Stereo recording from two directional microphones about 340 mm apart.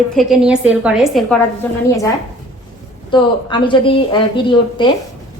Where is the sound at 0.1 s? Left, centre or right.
Centre.